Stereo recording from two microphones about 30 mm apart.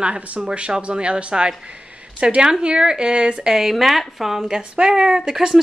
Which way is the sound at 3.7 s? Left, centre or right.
Centre.